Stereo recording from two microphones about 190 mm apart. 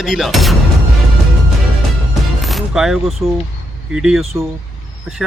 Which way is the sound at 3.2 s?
15° right (ahead or behind).